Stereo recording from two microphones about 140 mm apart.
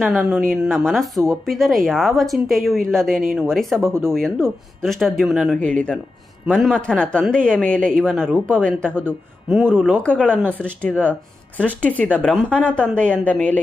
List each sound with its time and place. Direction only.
0.0 s speech: 5° right (ahead or behind)
3.8 s speech: 20° right (ahead or behind)
4.1 s speech: 5° left (ahead or behind)
5.5 s speech: 10° left (ahead or behind)
9.5 s speech: centre (ahead or behind)